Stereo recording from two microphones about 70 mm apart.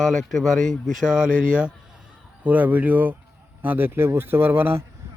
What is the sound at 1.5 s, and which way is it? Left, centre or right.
A man's voice, centre.